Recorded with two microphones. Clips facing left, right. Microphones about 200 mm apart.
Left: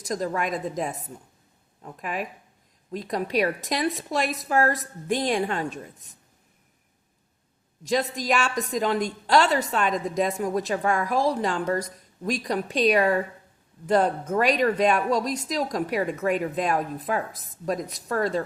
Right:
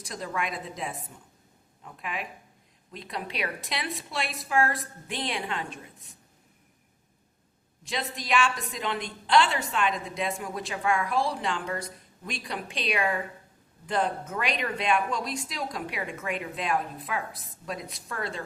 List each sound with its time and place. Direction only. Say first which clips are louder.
0.0 s a woman's voice: left 6 dB; 45° left (ahead or behind)
7.9 s a woman's voice: left 7 dB; 45° left (ahead or behind)